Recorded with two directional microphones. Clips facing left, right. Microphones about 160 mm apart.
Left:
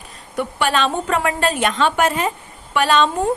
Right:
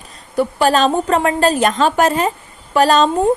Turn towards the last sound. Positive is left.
turn(degrees=-40)  # may be behind; listen again after turning